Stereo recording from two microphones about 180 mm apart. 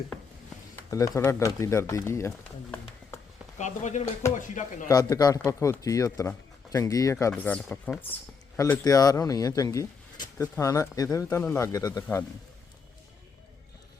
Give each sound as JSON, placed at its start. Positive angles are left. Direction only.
{"t": 0.9, "sound": "speech", "side_deg": 20}
{"t": 3.6, "sound": "speech", "side_deg": 40}
{"t": 4.9, "sound": "speech", "side_deg": 20}